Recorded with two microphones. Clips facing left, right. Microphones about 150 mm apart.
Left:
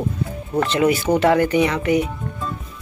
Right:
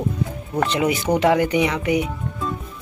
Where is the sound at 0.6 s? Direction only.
15° right (ahead or behind).